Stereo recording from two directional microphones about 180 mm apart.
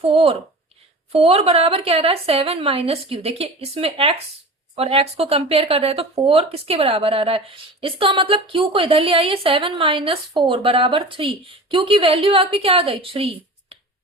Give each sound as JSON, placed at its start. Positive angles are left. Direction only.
{"t": 0.0, "sound": "a woman's voice", "side_deg": -30}